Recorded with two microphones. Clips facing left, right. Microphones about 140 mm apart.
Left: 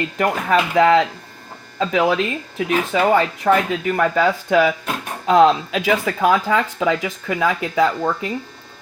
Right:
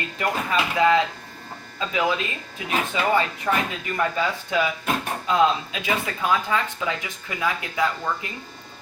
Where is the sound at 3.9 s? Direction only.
65° left (ahead or behind); by 7.8 s 90° left.